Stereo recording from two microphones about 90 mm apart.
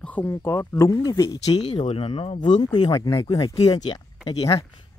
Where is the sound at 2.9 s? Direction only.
40° left (ahead or behind).